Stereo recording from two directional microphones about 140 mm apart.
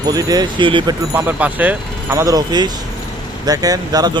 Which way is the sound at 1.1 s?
15° right (ahead or behind).